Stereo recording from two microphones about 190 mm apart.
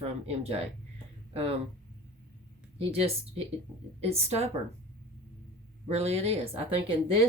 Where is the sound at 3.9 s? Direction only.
35° right (ahead or behind).